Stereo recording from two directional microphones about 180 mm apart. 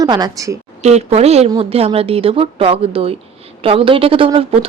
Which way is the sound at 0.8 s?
35° right (ahead or behind).